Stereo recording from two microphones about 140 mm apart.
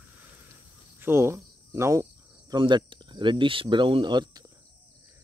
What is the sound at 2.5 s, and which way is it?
Speech, 35° right (ahead or behind).